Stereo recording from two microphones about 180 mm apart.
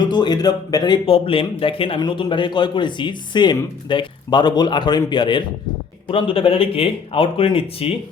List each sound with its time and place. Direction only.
0.0 s speech: 25° left (ahead or behind)